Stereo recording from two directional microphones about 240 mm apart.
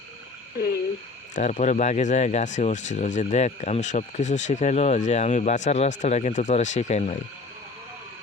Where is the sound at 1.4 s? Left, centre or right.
Left.